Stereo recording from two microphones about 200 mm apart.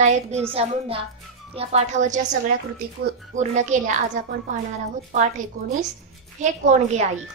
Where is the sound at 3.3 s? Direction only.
35° right (ahead or behind).